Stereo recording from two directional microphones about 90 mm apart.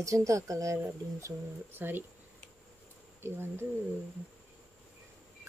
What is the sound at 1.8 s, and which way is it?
Speech, 25° right (ahead or behind).